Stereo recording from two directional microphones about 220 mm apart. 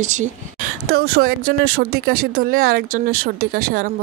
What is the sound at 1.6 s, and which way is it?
Speech, 75° right (ahead or behind).